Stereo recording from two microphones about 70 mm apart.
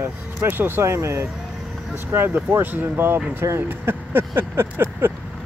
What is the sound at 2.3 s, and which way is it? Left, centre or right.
Speech, right.